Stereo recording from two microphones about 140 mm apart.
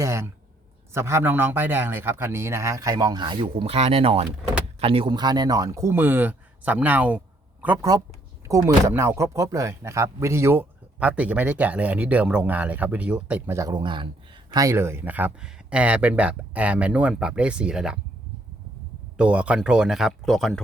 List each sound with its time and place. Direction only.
0.0 s a man's voice: 20° right (ahead or behind)
13.6 s speech: 30° right (ahead or behind)
14.5 s speech: 20° right (ahead or behind); by 18.0 s 5° right (ahead or behind)
19.1 s speech: 5° right (ahead or behind)